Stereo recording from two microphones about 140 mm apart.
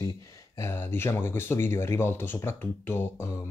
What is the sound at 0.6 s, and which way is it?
Speech, 15° left (ahead or behind).